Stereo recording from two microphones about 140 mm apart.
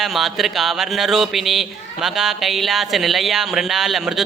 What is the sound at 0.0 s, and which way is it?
Speech, centre (ahead or behind).